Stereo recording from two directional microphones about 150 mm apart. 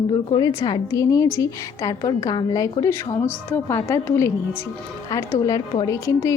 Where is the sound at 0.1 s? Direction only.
30° left (ahead or behind).